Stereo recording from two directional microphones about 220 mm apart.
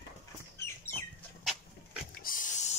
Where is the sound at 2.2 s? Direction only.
40° left (ahead or behind).